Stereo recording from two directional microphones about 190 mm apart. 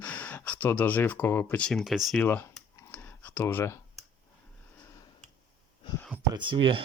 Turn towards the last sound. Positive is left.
turn(degrees=-25)  # may be behind; listen again after turning